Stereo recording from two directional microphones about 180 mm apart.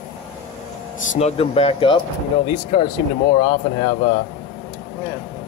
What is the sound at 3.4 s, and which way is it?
Speech, 25° left (ahead or behind).